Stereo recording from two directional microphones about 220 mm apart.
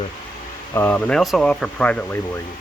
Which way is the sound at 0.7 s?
10° left (ahead or behind).